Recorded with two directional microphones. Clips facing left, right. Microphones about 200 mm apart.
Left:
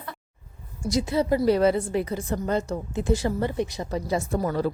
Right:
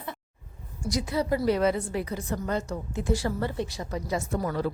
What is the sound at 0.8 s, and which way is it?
A woman's voice, 25° left (ahead or behind).